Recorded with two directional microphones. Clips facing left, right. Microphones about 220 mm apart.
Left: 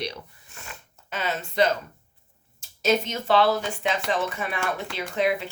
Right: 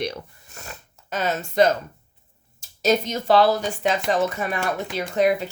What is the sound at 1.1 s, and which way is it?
Speech, 45° right (ahead or behind).